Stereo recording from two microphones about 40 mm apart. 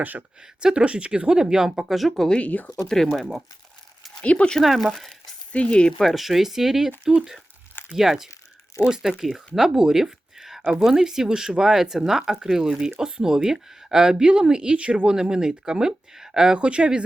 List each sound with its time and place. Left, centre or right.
0.6 s speech: centre
1.9 s speech: centre
2.1 s speech: centre
2.4 s speech: left
2.7 s speech: centre
4.2 s speech: left
4.8 s speech: centre
5.5 s speech: left
6.0 s speech: centre
7.9 s speech: centre; by 15.1 s right
15.1 s speech: centre
16.6 s speech: right